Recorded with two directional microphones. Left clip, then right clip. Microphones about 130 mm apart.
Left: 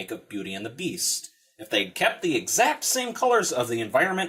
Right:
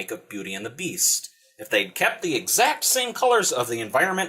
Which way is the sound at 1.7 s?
45° left (ahead or behind).